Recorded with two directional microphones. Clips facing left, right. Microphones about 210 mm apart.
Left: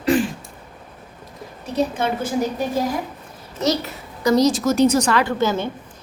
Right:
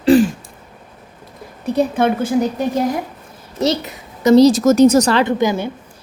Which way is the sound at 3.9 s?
25° right (ahead or behind).